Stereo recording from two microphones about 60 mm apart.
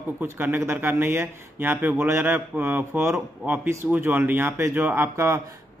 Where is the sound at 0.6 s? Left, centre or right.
Right.